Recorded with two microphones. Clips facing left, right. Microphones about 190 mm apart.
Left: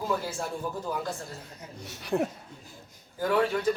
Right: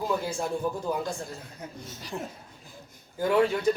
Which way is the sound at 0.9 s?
15° right (ahead or behind).